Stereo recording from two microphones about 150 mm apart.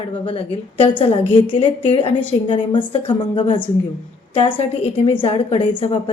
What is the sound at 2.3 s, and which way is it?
Speech, 35° left (ahead or behind).